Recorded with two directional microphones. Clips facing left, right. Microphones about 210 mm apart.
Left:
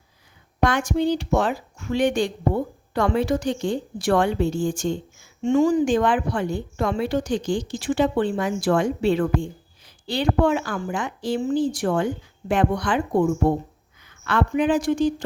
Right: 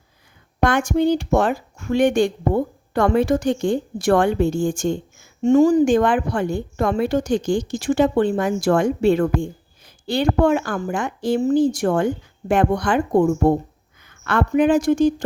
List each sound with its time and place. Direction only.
0.6 s a woman's voice: 50° right (ahead or behind)